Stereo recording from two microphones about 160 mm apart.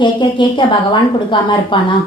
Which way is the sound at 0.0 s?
30° left (ahead or behind).